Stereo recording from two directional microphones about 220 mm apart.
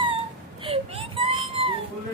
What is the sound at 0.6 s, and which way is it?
Whimper, 25° right (ahead or behind).